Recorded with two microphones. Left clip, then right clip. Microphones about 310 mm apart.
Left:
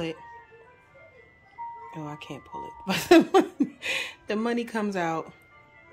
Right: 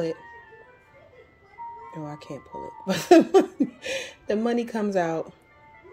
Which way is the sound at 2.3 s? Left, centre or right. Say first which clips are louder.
Right 1 dB; centre.